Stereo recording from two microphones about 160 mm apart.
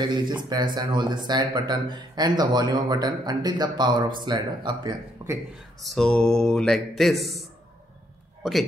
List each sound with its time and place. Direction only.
0.0 s speech: 30° right (ahead or behind)
5.2 s a sound: 20° right (ahead or behind)
5.8 s speech: centre (ahead or behind)